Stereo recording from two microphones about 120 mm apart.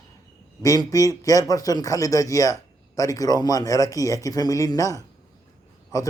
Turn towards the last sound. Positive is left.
turn(degrees=30)  # may be behind; listen again after turning